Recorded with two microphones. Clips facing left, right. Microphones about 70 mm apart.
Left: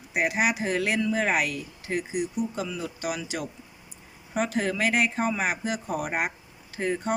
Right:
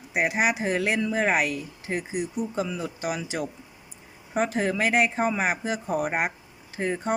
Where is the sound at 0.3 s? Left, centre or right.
Right.